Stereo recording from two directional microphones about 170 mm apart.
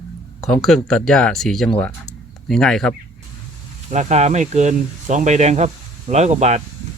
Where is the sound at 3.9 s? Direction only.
45° right (ahead or behind).